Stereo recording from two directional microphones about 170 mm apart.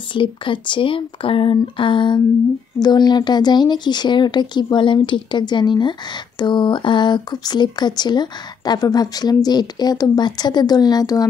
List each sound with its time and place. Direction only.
0.1 s speech: 30° left (ahead or behind)